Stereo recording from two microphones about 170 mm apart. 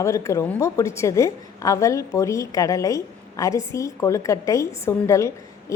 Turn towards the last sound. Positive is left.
turn(degrees=15)  # may be behind; listen again after turning